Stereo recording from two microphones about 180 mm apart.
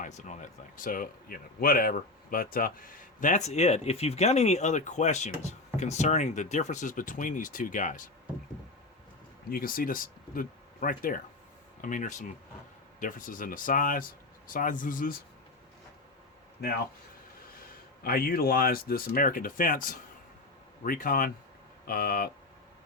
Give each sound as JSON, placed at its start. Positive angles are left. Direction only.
{"t": 0.0, "sound": "a man's voice", "side_deg": 40}
{"t": 9.5, "sound": "a man's voice", "side_deg": 55}
{"t": 16.6, "sound": "speech", "side_deg": 65}
{"t": 18.0, "sound": "a man's voice", "side_deg": 55}